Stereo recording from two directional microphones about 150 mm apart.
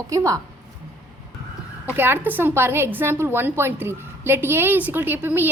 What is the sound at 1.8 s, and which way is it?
A woman's voice, 15° right (ahead or behind).